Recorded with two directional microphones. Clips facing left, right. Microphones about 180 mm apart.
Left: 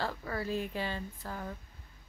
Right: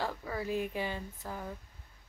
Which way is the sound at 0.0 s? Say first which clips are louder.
Even; 10° right (ahead or behind).